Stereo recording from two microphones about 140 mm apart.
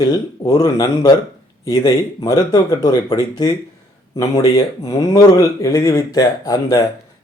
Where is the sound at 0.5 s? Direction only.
25° left (ahead or behind).